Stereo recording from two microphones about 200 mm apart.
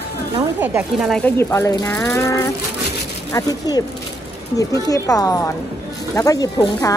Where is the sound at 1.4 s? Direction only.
15° left (ahead or behind).